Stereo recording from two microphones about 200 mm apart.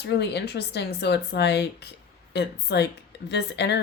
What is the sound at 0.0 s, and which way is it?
Speech, 55° left (ahead or behind).